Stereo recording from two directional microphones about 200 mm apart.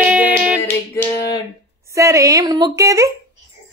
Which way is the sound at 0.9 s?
20° left (ahead or behind).